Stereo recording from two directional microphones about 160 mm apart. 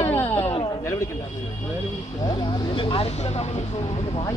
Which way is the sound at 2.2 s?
30° left (ahead or behind).